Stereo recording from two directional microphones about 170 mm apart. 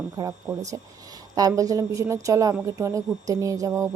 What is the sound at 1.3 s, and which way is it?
Speech, 20° right (ahead or behind).